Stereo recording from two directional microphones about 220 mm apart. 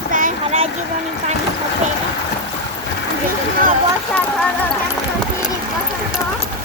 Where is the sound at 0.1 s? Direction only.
35° right (ahead or behind).